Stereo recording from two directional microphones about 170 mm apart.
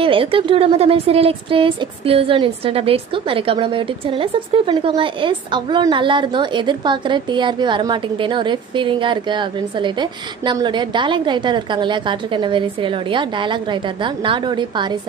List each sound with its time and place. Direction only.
0.0 s a woman's voice: 30° right (ahead or behind)